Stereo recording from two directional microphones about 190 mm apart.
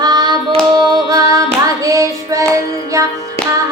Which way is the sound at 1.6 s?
15° right (ahead or behind).